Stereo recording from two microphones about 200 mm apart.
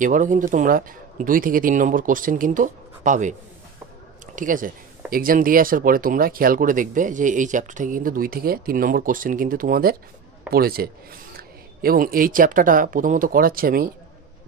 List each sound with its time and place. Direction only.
0.0 s speech: 40° right (ahead or behind)
4.4 s speech: 40° right (ahead or behind)